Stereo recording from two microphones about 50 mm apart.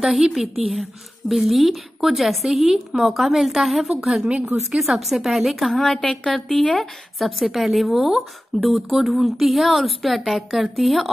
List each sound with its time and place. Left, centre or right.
0.0 s a woman's voice: centre
4.3 s a woman's voice: right
4.6 s a woman's voice: centre